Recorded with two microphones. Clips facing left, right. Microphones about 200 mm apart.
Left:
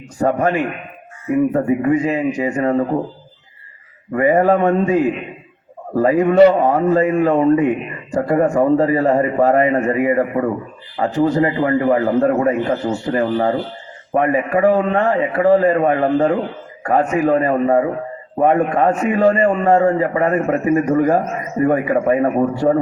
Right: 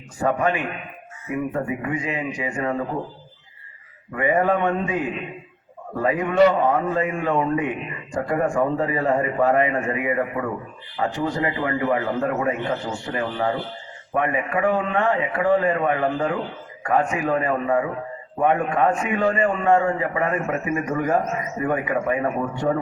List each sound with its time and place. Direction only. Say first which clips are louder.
0.2 s a man's voice: left 5 dB; 40° left (ahead or behind)
4.1 s a man's voice: left 6 dB; 40° left (ahead or behind)
6.0 s a man's voice: left 7 dB; 40° left (ahead or behind)